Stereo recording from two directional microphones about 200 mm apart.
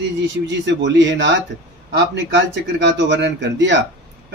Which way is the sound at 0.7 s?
65° right (ahead or behind).